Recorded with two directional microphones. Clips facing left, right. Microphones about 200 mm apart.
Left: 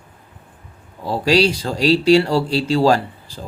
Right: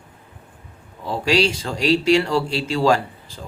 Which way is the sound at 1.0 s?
35° left (ahead or behind).